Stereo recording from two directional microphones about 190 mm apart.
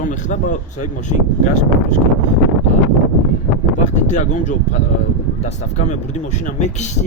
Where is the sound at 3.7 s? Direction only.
40° left (ahead or behind).